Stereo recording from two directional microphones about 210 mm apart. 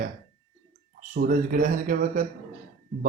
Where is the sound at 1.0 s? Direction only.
40° right (ahead or behind).